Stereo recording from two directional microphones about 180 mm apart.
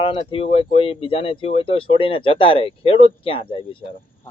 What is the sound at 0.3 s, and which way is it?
Speech, 30° left (ahead or behind).